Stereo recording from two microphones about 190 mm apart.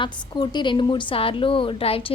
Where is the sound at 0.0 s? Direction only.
25° left (ahead or behind).